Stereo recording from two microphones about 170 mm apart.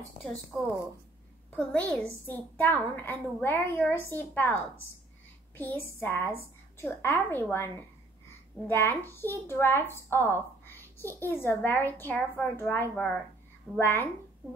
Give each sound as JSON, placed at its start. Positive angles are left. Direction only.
{"t": 1.5, "sound": "a woman's voice", "side_deg": 5}
{"t": 5.6, "sound": "a woman's voice", "side_deg": 10}